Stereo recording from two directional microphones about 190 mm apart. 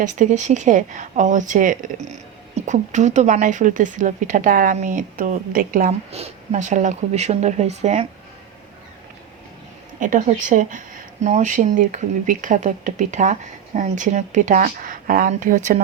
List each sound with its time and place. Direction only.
0.0 s speech: 40° right (ahead or behind)
6.1 s speech: 35° right (ahead or behind)
10.0 s speech: 40° right (ahead or behind)